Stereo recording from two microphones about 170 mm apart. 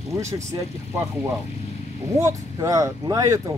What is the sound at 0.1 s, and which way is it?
Speech, 15° right (ahead or behind).